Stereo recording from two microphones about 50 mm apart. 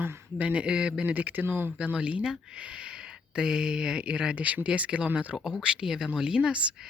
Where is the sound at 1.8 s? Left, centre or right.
Right.